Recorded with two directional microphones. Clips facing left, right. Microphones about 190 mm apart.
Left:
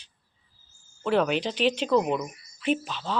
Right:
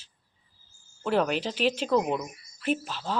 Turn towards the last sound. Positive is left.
turn(degrees=-5)  # may be behind; listen again after turning